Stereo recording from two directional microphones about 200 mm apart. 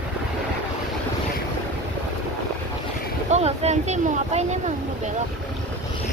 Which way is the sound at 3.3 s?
35° right (ahead or behind).